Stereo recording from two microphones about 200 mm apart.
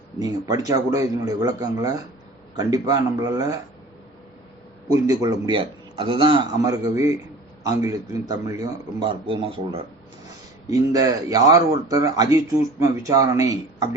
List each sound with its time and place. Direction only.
0.2 s a man's voice: 20° right (ahead or behind)
4.9 s a man's voice: 15° right (ahead or behind)